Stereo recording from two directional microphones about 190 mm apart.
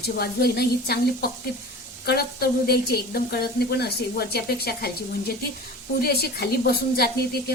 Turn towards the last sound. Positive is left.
turn(degrees=55)  # may be behind; listen again after turning